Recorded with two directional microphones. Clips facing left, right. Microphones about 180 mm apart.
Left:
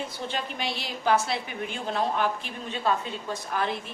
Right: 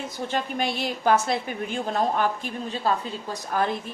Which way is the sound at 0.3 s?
50° right (ahead or behind).